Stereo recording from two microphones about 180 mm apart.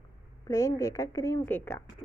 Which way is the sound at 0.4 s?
20° left (ahead or behind).